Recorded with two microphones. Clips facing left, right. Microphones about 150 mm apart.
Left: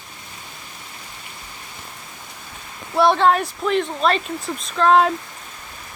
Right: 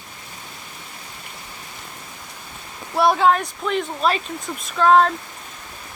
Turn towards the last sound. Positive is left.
turn(degrees=0)  # may be behind; listen again after turning